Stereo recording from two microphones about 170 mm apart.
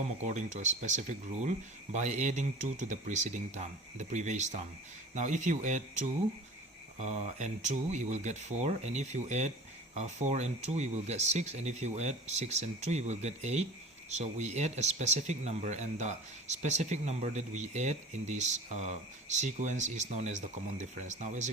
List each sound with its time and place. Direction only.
0.3 s speech: 45° right (ahead or behind)